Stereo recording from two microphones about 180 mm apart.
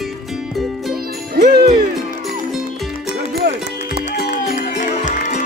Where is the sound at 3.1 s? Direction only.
70° right (ahead or behind).